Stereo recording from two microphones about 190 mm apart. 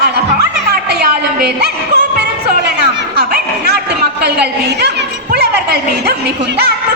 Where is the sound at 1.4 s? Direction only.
60° right (ahead or behind).